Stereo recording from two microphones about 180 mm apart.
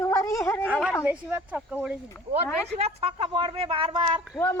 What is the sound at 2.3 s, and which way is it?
A woman's voice, 35° right (ahead or behind).